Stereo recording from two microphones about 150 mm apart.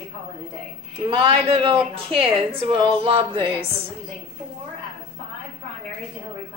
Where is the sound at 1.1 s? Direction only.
35° right (ahead or behind).